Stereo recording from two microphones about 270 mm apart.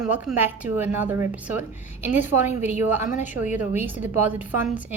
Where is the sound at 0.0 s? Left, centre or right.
Centre.